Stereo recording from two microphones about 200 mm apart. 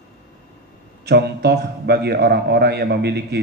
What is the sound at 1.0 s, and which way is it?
A man's voice, 55° right (ahead or behind).